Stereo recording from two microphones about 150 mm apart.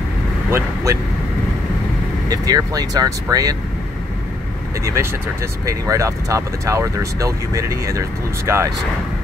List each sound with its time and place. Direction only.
0.5 s speech: 15° right (ahead or behind)
2.2 s speech: 25° right (ahead or behind)
4.8 s speech: 20° right (ahead or behind)